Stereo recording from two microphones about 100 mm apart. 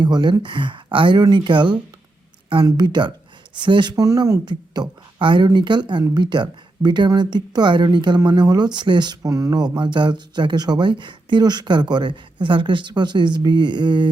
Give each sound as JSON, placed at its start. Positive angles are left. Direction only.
{"t": 0.0, "sound": "speech", "side_deg": -45}
{"t": 4.0, "sound": "a woman's voice", "side_deg": -35}